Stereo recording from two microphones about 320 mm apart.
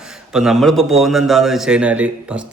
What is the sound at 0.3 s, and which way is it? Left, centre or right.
A man's voice, centre.